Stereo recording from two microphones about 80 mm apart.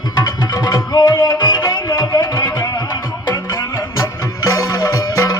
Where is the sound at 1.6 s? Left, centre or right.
Left.